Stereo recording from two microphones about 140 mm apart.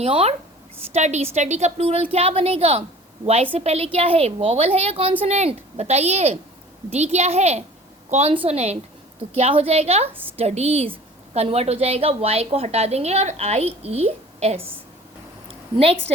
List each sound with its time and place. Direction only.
0.0 s a woman's voice: 45° right (ahead or behind)
10.1 s a woman's voice: 15° right (ahead or behind)
10.3 s a woman's voice: 50° right (ahead or behind)
15.8 s a woman's voice: 45° right (ahead or behind)